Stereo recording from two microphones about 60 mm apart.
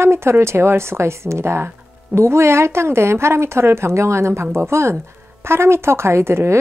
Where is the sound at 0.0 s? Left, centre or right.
Right.